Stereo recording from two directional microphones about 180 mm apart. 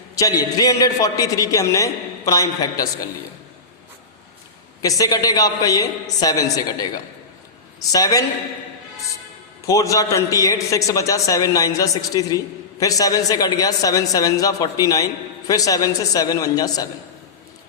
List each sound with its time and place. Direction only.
0.2 s a man's voice: 20° left (ahead or behind)
4.8 s a man's voice: 20° left (ahead or behind)
9.6 s a man's voice: 15° left (ahead or behind)